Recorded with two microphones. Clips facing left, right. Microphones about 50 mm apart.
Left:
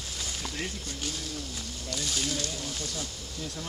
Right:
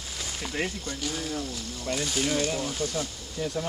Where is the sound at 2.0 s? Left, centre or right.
Right.